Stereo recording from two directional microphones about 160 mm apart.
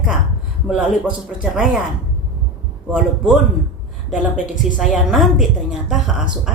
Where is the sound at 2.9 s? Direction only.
5° right (ahead or behind).